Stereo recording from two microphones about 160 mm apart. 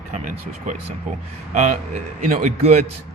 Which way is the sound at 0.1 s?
50° right (ahead or behind).